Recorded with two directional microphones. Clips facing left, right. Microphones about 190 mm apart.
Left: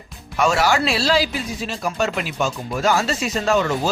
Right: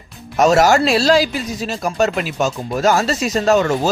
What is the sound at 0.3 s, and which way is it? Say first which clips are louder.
Speech: right 6 dB; 40° right (ahead or behind).